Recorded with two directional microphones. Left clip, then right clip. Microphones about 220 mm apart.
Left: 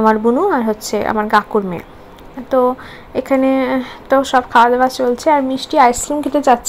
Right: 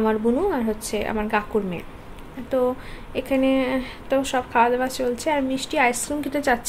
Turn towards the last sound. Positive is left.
turn(degrees=20)  # may be behind; listen again after turning